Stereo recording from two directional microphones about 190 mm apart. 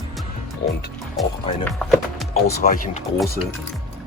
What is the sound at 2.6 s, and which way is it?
Speech, 45° left (ahead or behind).